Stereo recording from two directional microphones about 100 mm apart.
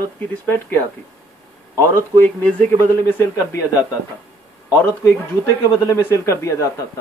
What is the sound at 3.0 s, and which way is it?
Speech, 20° left (ahead or behind).